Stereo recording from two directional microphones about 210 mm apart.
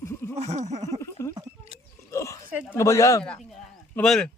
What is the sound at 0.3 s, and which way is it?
Speech, 30° right (ahead or behind).